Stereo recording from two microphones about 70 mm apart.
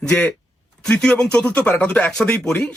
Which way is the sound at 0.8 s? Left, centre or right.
Centre.